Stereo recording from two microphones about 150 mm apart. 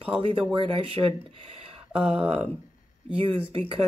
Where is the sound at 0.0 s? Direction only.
35° right (ahead or behind).